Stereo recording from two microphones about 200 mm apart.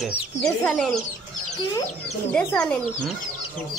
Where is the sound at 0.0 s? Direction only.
Centre (ahead or behind).